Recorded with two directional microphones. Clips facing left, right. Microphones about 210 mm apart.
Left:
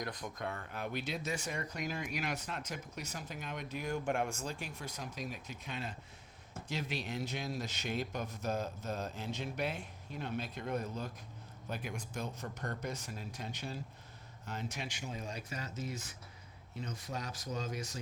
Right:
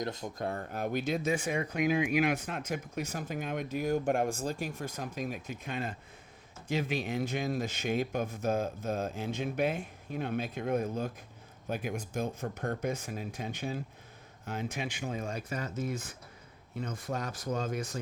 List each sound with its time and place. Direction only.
0.0 s speech: 25° right (ahead or behind); by 18.0 s 55° right (ahead or behind)